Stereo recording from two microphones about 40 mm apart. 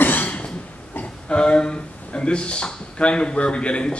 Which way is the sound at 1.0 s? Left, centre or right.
Left.